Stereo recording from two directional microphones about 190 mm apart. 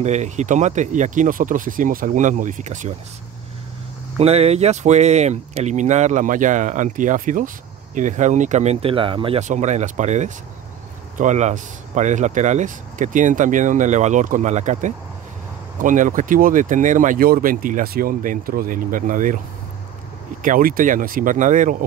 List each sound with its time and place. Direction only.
0.0 s speech: 35° right (ahead or behind)
4.2 s speech: 35° right (ahead or behind)
20.4 s speech: 45° right (ahead or behind)